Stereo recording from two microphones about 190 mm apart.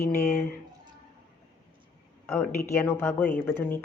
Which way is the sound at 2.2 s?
10° left (ahead or behind).